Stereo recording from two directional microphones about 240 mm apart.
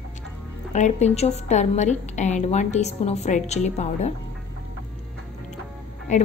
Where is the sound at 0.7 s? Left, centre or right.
Left.